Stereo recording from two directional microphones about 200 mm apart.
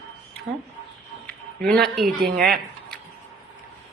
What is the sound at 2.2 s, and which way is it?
Speech, 50° right (ahead or behind).